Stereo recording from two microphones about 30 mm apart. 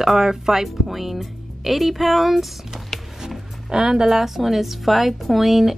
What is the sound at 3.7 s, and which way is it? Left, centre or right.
Speech, right.